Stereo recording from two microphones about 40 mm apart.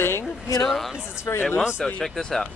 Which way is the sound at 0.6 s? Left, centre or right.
Centre.